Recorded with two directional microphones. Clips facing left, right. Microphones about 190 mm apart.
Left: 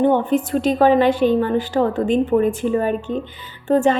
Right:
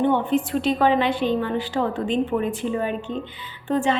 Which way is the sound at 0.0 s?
40° left (ahead or behind).